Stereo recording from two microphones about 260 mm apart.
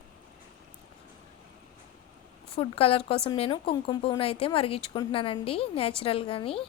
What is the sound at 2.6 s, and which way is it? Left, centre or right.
Speech, left.